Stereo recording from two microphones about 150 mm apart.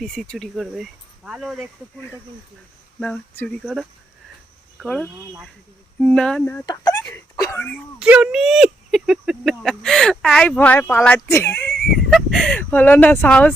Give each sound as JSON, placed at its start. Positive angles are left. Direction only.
{"t": 0.0, "sound": "speech", "side_deg": 5}
{"t": 3.0, "sound": "speech", "side_deg": 10}
{"t": 6.7, "sound": "speech", "side_deg": 25}
{"t": 7.9, "sound": "speech", "side_deg": -5}
{"t": 11.7, "sound": "speech", "side_deg": 0}